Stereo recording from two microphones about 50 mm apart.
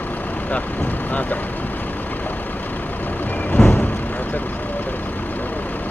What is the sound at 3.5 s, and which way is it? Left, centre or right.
Vehicle, left.